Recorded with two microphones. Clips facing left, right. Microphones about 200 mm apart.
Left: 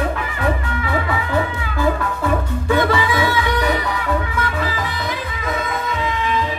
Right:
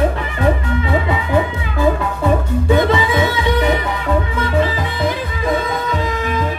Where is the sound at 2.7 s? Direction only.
20° right (ahead or behind).